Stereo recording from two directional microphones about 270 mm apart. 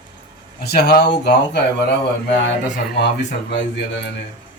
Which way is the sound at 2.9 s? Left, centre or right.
Left.